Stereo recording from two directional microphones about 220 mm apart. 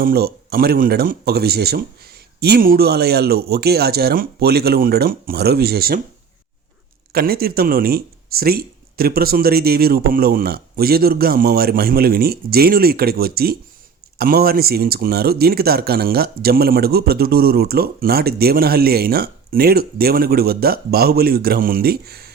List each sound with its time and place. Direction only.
0.0 s speech: 45° right (ahead or behind)
7.1 s speech: 45° right (ahead or behind)